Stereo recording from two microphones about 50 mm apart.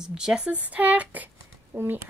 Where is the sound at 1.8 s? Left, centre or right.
Right.